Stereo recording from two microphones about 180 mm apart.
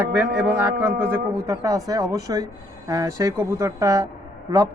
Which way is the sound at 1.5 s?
20° right (ahead or behind).